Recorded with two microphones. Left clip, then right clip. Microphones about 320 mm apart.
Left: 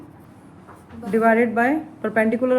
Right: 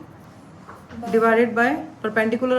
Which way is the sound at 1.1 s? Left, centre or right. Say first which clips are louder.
Even; centre.